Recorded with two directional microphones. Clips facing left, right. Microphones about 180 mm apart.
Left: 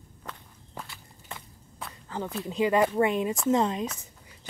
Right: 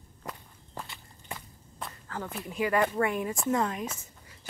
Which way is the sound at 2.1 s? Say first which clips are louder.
Left 4 dB; 20° left (ahead or behind).